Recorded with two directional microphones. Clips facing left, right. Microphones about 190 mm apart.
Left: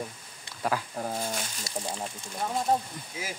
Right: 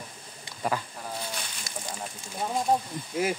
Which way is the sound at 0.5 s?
Centre (ahead or behind).